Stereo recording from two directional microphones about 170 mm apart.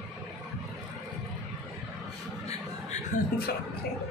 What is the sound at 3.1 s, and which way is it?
Speech, 50° left (ahead or behind).